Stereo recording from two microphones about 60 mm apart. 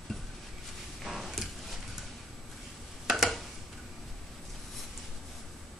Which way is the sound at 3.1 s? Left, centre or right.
Centre.